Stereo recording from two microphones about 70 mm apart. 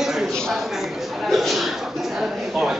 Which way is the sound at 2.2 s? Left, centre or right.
Centre.